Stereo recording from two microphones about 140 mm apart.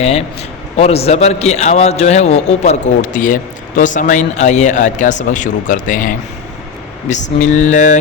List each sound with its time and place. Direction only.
0.0 s a man's voice: 45° left (ahead or behind)